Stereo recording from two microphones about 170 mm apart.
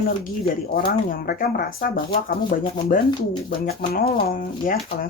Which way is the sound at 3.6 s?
60° left (ahead or behind).